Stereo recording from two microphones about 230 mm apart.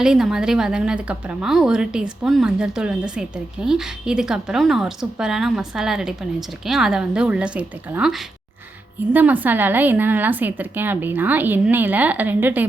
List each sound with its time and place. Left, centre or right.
0.0 s a woman's voice: centre